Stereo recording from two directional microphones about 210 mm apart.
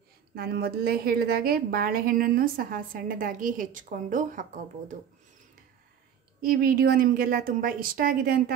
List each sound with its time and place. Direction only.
0.3 s a woman's voice: 45° right (ahead or behind)
6.4 s a woman's voice: 45° right (ahead or behind)